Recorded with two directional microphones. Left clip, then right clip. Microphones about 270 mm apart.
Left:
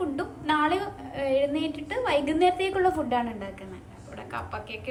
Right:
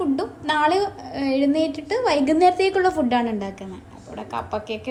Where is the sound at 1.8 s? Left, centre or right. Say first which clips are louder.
Right 4 dB; centre.